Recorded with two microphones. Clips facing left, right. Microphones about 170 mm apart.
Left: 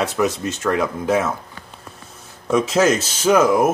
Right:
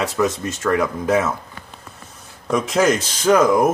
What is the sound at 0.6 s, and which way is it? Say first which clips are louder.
Speech: right 1 dB; 20° left (ahead or behind).